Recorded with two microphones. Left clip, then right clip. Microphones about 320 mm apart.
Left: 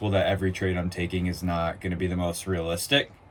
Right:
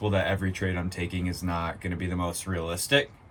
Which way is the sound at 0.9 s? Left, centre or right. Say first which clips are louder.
Left 3 dB; centre.